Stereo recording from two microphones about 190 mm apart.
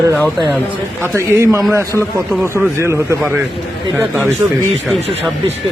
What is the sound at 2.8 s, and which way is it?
Speech, 15° right (ahead or behind).